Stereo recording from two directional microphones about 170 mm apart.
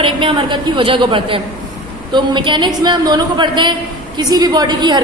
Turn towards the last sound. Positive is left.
turn(degrees=-25)  # may be behind; listen again after turning